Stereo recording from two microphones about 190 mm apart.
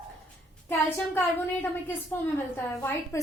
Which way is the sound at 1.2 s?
10° left (ahead or behind).